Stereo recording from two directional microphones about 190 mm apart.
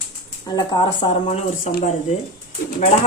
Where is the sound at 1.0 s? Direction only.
35° left (ahead or behind).